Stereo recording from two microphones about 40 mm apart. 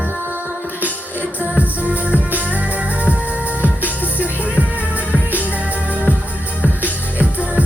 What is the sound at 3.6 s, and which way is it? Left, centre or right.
Music, right.